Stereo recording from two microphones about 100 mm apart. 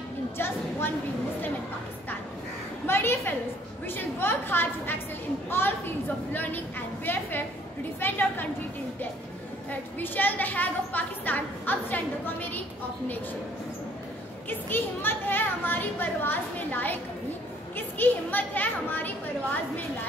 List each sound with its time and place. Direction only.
0.4 s speech: 25° left (ahead or behind)
2.9 s speech: 25° left (ahead or behind)
7.1 s speech: 20° left (ahead or behind)
9.7 s a woman's voice: 20° left (ahead or behind)
14.5 s speech: 20° left (ahead or behind)